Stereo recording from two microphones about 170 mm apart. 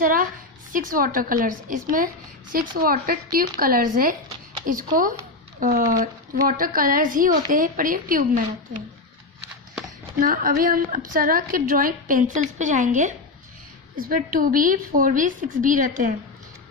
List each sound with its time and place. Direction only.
0.0 s a woman's voice: 55° right (ahead or behind)
10.2 s a woman's voice: 55° right (ahead or behind)